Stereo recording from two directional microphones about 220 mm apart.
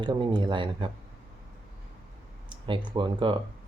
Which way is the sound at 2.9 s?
20° right (ahead or behind).